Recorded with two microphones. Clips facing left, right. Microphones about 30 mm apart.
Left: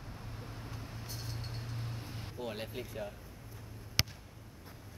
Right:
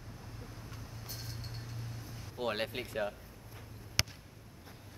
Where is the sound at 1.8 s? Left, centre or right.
Left.